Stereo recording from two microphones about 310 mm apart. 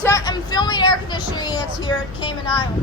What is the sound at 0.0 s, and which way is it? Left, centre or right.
Vehicle, centre.